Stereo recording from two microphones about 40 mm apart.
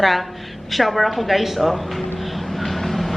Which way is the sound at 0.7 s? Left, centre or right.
Centre.